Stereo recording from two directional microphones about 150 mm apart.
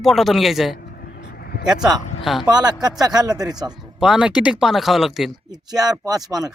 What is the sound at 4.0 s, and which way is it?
Speech, 5° right (ahead or behind).